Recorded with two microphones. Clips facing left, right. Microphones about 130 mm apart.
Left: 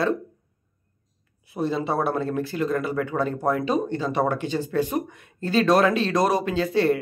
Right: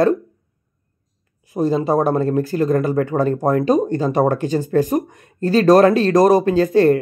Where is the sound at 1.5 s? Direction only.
40° right (ahead or behind).